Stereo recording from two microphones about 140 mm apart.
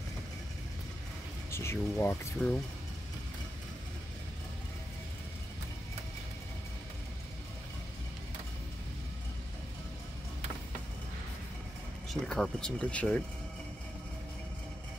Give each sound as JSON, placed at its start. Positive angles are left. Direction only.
{"t": 1.5, "sound": "speech", "side_deg": 20}
{"t": 12.1, "sound": "speech", "side_deg": 0}